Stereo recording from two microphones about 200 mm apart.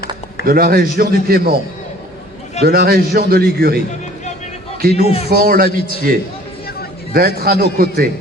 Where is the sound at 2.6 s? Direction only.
50° right (ahead or behind).